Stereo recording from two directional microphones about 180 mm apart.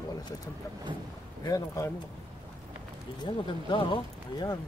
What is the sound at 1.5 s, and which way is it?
Speech, 15° left (ahead or behind).